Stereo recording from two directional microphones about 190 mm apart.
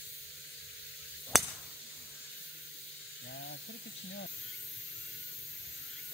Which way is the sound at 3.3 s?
65° left (ahead or behind).